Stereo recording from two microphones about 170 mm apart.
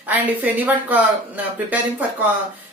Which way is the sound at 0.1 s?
10° right (ahead or behind).